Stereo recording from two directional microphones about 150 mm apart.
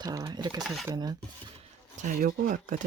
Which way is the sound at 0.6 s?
Centre (ahead or behind).